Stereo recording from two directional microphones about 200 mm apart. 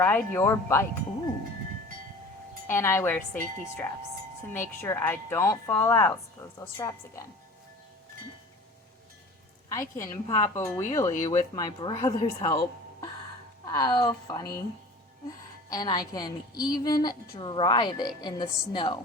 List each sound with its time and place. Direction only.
0.0 s speech: 10° left (ahead or behind)
2.6 s speech: 10° left (ahead or behind)
4.5 s speech: 10° left (ahead or behind)
9.7 s a woman's voice: 15° left (ahead or behind)
15.7 s a woman's voice: 20° left (ahead or behind)